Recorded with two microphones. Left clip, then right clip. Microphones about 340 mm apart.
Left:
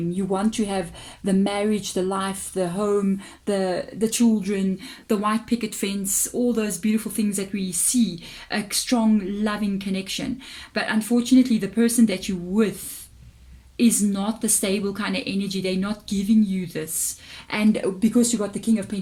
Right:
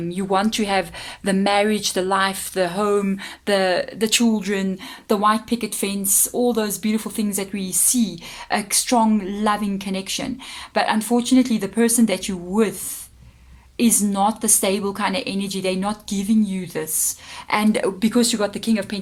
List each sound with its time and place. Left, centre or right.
0.2 s speech: right
5.0 s a woman's voice: centre
13.7 s a woman's voice: centre